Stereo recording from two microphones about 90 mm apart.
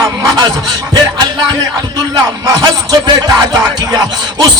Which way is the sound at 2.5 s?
40° right (ahead or behind).